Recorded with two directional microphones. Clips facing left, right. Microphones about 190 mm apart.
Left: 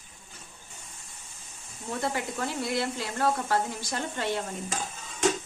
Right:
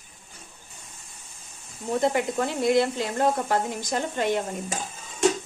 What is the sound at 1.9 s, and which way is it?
Speech, 20° right (ahead or behind).